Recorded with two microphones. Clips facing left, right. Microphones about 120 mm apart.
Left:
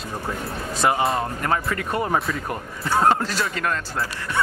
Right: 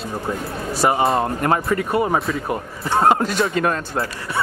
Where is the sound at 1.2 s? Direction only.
30° right (ahead or behind).